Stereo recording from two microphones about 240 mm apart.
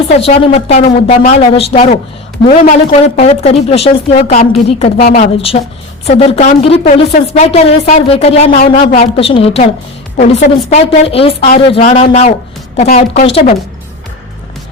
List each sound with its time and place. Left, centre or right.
0.1 s a woman's voice: left
3.2 s a woman's voice: left